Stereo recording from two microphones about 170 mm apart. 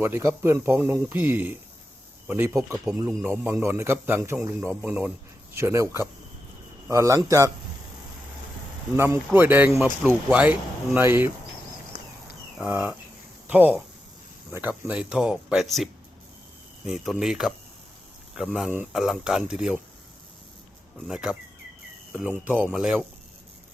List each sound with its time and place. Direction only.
0.0 s speech: 15° right (ahead or behind)
9.0 s speech: 15° right (ahead or behind)
12.5 s speech: 10° right (ahead or behind)
18.5 s speech: 5° right (ahead or behind)
21.1 s speech: 5° right (ahead or behind)